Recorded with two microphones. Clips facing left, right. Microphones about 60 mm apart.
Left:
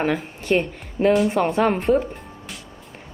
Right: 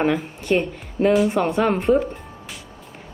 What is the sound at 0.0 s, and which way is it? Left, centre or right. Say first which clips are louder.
A woman's voice: right 2 dB; centre.